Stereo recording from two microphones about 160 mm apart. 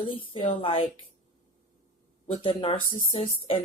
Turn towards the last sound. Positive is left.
turn(degrees=35)  # may be behind; listen again after turning